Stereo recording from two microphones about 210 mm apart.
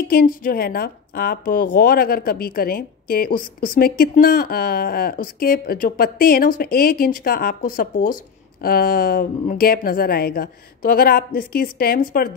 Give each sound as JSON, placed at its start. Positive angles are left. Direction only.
{"t": 0.1, "sound": "speech", "side_deg": 40}